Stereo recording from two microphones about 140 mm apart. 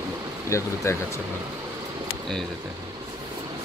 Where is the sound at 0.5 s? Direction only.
20° left (ahead or behind).